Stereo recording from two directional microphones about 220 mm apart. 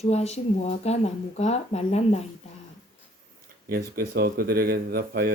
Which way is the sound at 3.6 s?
45° right (ahead or behind).